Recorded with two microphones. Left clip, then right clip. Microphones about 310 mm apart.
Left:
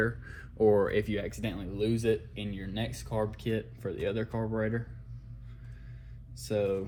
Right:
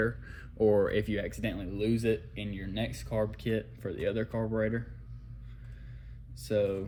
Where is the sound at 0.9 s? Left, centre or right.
Left.